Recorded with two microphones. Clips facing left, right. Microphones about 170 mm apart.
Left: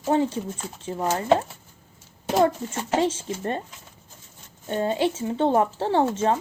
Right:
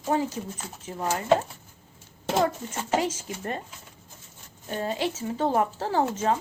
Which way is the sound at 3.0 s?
30° left (ahead or behind).